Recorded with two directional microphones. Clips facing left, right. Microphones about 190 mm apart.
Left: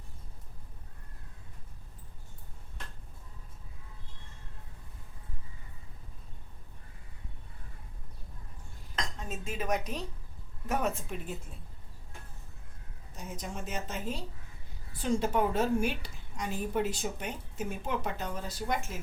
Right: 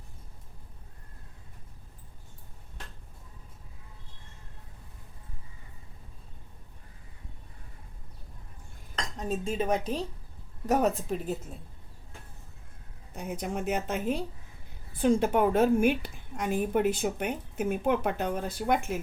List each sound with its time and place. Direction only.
9.1 s speech: 35° right (ahead or behind)
13.1 s a woman's voice: 60° right (ahead or behind)